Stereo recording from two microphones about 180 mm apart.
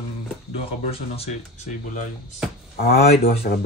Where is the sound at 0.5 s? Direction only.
35° left (ahead or behind).